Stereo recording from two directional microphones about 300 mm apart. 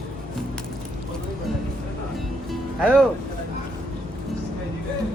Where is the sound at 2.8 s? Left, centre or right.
Centre.